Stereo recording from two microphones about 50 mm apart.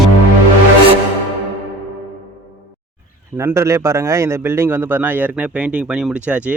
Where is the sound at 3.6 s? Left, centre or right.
Right.